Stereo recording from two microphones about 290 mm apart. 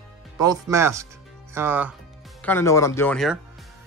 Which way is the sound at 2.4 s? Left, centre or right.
Centre.